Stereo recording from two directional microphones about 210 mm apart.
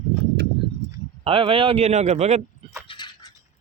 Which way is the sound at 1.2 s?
25° right (ahead or behind).